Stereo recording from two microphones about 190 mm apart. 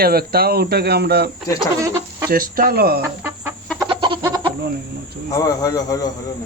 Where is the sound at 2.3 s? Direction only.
50° right (ahead or behind).